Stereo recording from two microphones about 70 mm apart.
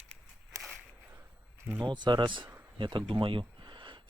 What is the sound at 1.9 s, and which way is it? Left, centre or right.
Speech, right.